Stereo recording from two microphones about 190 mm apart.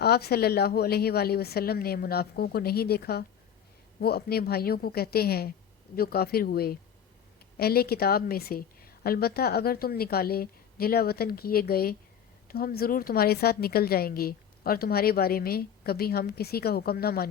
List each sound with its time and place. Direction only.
0.0 s a woman's voice: 55° left (ahead or behind)